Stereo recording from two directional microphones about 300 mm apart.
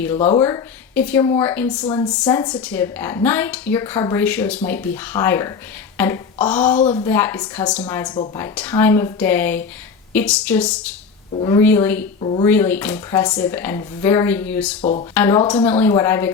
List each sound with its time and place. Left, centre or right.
0.2 s speech: left
0.4 s speech: centre
12.2 s speech: centre
12.5 s speech: centre
14.8 s speech: left
15.1 s speech: centre